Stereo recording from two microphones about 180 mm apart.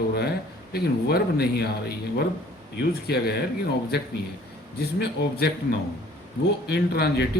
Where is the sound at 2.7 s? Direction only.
60° left (ahead or behind).